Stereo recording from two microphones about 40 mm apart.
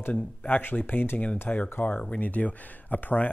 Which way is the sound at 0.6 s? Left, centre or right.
Left.